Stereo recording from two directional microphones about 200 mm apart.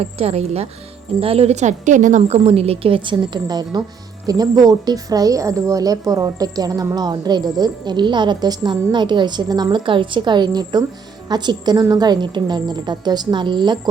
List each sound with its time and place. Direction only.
0.0 s a woman's voice: 30° right (ahead or behind)